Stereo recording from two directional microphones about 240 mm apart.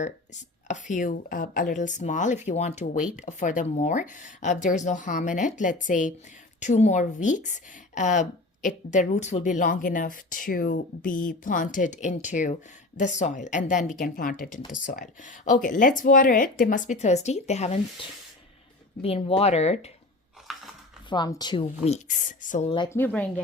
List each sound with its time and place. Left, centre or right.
0.0 s speech: left
19.0 s a woman's voice: left
20.5 s a sound: centre
21.1 s a woman's voice: centre
23.0 s speech: centre